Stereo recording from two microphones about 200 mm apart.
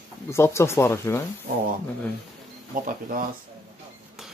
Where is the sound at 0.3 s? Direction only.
15° left (ahead or behind).